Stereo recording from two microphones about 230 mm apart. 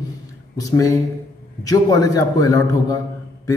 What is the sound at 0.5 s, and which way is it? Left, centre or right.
Speech, centre.